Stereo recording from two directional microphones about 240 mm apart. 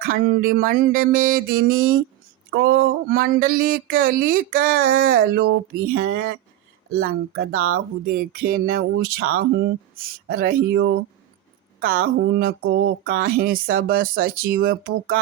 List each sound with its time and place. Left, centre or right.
0.0 s speech: right
7.6 s speech: right